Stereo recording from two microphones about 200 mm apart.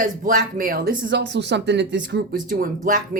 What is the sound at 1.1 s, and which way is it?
Speech, 60° right (ahead or behind).